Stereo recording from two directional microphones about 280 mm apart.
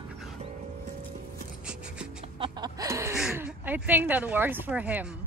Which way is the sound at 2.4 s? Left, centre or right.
Centre.